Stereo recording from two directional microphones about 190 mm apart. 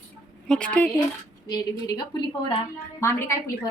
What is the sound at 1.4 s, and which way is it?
A woman's voice, 20° left (ahead or behind).